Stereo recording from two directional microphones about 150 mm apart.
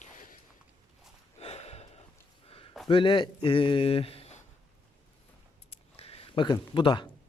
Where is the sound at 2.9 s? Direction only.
35° left (ahead or behind).